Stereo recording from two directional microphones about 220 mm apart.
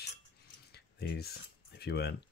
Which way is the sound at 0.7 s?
45° left (ahead or behind).